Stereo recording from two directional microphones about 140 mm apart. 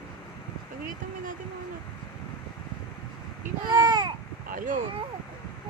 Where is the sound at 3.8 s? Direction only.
30° right (ahead or behind).